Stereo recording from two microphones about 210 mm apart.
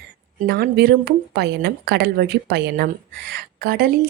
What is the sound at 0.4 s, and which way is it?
A woman's voice, 50° right (ahead or behind).